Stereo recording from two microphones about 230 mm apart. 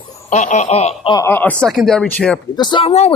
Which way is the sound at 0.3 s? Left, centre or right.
Left.